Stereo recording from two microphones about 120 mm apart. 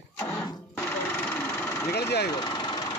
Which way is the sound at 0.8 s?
15° left (ahead or behind).